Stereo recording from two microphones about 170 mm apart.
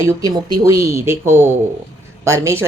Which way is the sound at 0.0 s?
20° right (ahead or behind).